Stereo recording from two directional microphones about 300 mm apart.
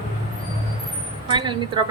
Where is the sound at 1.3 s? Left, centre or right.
Centre.